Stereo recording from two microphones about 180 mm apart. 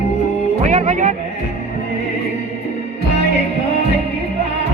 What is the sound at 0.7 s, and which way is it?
Music, 40° right (ahead or behind).